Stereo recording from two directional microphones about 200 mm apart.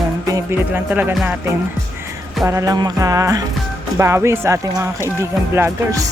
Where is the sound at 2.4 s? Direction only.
15° right (ahead or behind).